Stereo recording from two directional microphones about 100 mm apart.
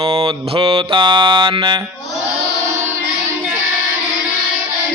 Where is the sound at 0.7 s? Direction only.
55° right (ahead or behind).